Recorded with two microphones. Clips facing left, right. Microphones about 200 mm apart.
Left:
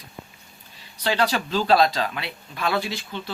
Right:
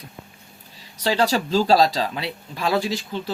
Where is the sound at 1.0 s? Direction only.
35° right (ahead or behind).